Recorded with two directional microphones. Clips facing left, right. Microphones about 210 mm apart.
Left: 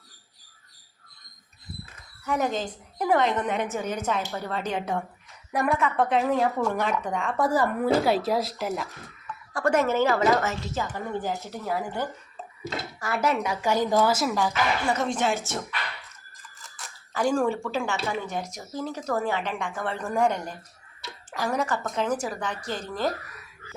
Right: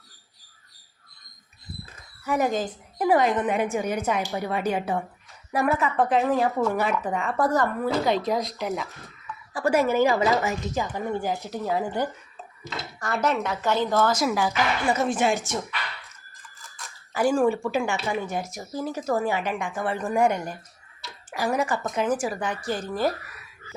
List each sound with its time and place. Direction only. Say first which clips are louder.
2.2 s a woman's voice: right 2 dB; 10° right (ahead or behind)
13.0 s a woman's voice: right 1 dB; 5° left (ahead or behind)
14.3 s speech: right 1 dB; 10° right (ahead or behind)
17.2 s speech: right 3 dB; 5° right (ahead or behind)